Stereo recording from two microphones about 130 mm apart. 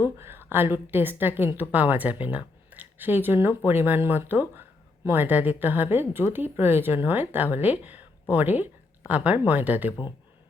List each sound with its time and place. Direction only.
0.0 s speech: 20° right (ahead or behind)